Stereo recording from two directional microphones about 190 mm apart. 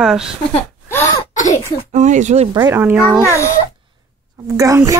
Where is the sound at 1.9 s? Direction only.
40° right (ahead or behind).